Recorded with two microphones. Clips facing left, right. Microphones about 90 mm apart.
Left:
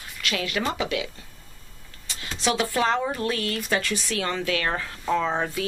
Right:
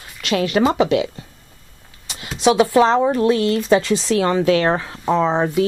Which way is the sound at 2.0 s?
15° right (ahead or behind).